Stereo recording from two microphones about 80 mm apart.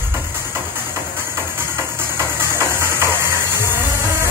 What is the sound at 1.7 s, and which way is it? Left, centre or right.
Music, right.